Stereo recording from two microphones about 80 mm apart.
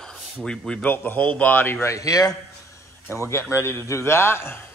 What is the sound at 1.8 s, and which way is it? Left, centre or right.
Speech, left.